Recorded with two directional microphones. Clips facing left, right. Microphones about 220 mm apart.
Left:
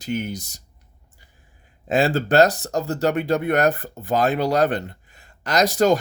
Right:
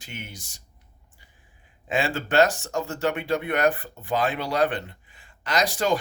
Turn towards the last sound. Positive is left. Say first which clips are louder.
# left 6 dB
turn(degrees=40)  # may be behind; listen again after turning